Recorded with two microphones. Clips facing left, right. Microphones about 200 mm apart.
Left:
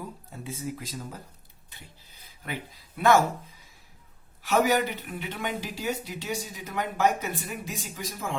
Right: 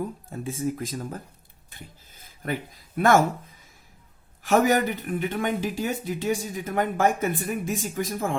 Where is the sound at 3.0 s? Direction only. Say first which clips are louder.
Right 2 dB; 50° right (ahead or behind).